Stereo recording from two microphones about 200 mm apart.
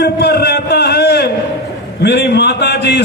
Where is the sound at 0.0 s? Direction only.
55° left (ahead or behind).